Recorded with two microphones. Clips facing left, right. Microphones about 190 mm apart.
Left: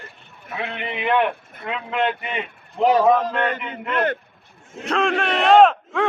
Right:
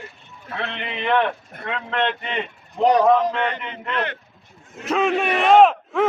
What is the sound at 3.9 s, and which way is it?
Speech, 45° left (ahead or behind).